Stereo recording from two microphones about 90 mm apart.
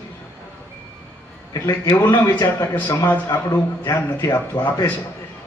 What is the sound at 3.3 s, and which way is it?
Speech, 40° left (ahead or behind).